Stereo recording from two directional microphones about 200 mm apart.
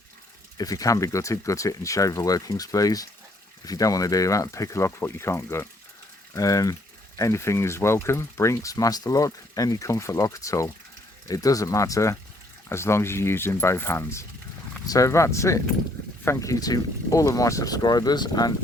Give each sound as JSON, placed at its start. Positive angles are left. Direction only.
{"t": 0.5, "sound": "speech", "side_deg": 15}